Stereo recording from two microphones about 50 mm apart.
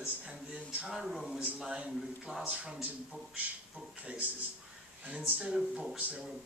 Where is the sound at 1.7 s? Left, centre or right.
Centre.